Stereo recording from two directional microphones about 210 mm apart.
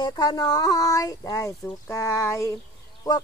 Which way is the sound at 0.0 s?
20° left (ahead or behind).